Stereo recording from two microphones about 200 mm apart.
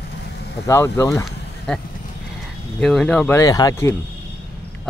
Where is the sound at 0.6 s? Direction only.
15° left (ahead or behind).